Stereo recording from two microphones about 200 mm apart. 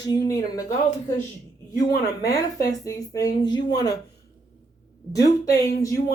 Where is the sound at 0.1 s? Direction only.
15° left (ahead or behind).